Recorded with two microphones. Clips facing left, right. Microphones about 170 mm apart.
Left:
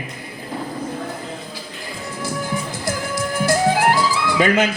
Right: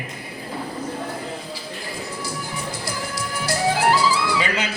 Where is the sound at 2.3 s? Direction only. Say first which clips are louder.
Left 5 dB; 50° left (ahead or behind).